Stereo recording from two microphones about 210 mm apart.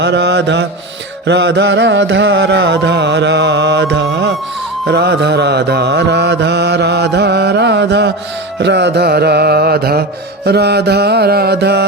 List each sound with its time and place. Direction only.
0.0 s carnatic music: 55° right (ahead or behind)
4.9 s music: 55° right (ahead or behind)